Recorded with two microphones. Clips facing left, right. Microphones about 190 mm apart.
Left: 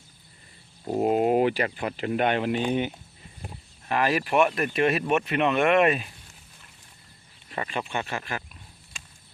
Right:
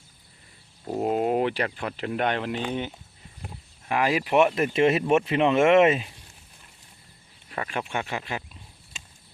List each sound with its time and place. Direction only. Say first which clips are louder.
0.9 s speech: left 2 dB; 10° left (ahead or behind)
3.8 s speech: even; 15° right (ahead or behind)
7.7 s speech: right 1 dB; 10° right (ahead or behind)